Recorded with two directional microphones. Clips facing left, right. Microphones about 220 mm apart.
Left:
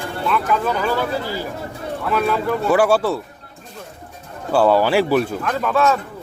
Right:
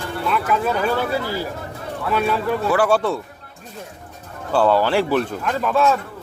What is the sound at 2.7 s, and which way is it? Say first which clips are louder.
Speech: left 3 dB; 10° left (ahead or behind).